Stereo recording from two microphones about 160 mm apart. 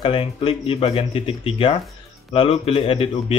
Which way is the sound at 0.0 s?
35° left (ahead or behind).